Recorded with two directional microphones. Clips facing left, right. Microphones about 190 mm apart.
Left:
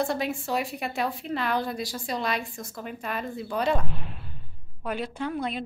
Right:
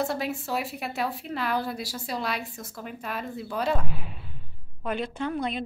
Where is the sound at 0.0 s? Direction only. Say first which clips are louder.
Left 1 dB; 5° right (ahead or behind).